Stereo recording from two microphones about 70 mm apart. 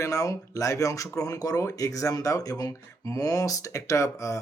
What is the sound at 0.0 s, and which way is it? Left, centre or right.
Speech, left.